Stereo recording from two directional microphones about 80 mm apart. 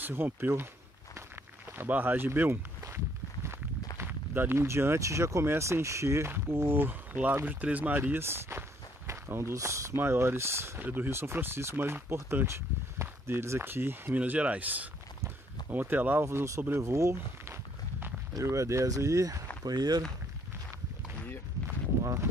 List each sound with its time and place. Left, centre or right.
0.0 s speech: right
1.8 s speech: right
4.0 s speech: right
15.2 s a sound: right
16.3 s speech: right
19.6 s speech: right
22.0 s a sound: right